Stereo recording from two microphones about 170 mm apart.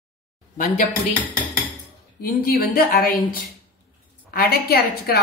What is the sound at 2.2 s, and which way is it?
A woman's voice, 60° left (ahead or behind).